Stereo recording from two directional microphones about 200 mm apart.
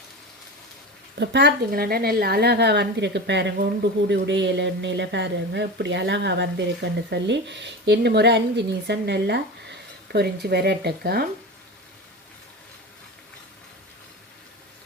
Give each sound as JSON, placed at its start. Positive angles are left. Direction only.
{"t": 1.2, "sound": "speech", "side_deg": -60}